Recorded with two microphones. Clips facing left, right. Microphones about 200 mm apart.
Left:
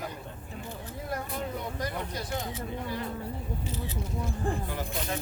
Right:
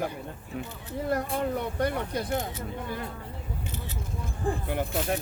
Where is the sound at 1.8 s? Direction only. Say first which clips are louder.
Right 9 dB; 60° right (ahead or behind).